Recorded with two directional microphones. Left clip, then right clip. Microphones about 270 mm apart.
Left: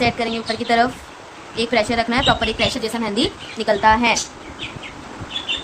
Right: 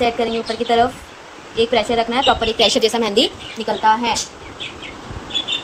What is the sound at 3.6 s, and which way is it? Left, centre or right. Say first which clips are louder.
Speech: left 1 dB; centre.